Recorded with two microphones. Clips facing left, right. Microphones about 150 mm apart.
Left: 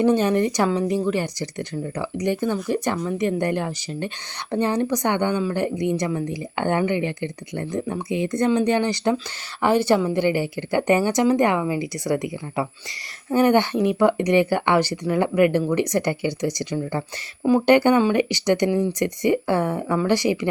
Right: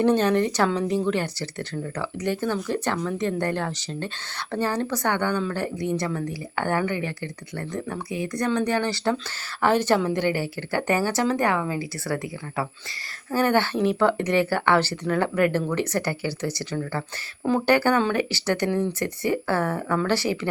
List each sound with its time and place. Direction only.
0.0 s a woman's voice: 10° left (ahead or behind)